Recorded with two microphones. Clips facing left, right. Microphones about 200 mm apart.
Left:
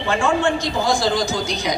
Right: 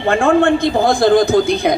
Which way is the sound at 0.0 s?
55° right (ahead or behind).